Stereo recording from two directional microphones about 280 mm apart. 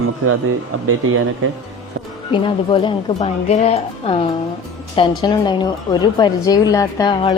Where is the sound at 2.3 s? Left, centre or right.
Centre.